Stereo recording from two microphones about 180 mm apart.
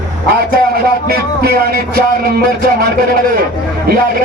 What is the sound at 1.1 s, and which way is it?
Music, 60° right (ahead or behind).